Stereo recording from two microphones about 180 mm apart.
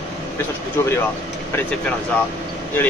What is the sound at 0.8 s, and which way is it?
Speech, 15° left (ahead or behind).